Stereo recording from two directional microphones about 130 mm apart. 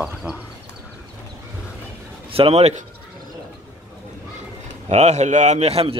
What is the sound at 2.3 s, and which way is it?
Speech, 50° right (ahead or behind).